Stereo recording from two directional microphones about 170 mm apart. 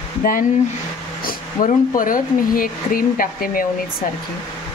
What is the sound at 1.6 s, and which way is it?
Speech, 55° left (ahead or behind).